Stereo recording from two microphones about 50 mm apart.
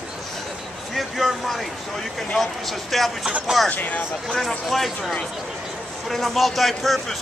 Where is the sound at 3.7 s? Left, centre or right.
Left.